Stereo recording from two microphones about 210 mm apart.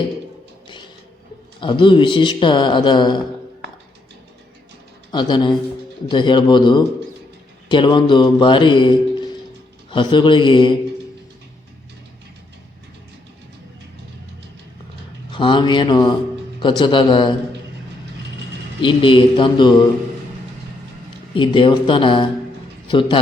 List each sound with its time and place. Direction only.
1.6 s a man's voice: 25° left (ahead or behind)
5.1 s a man's voice: 20° left (ahead or behind)
15.3 s a man's voice: 25° left (ahead or behind)
18.8 s a man's voice: 25° left (ahead or behind)
21.3 s a man's voice: 25° left (ahead or behind)